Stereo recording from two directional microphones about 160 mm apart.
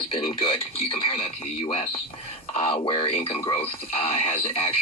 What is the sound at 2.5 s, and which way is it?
Speech, 40° left (ahead or behind).